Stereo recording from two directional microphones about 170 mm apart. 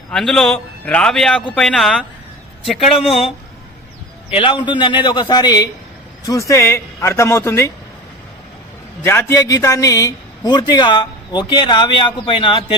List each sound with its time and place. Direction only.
0.1 s a man's voice: 5° left (ahead or behind)
3.0 s speech: 35° left (ahead or behind)
4.3 s a man's voice: 30° left (ahead or behind); by 7.7 s 15° left (ahead or behind)
9.0 s a man's voice: 15° left (ahead or behind); by 12.6 s 30° left (ahead or behind)